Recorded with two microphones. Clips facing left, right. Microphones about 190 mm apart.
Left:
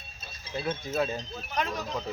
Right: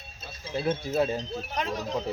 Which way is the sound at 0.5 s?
30° right (ahead or behind).